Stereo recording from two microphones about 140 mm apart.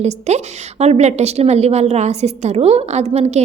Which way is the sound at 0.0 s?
55° right (ahead or behind).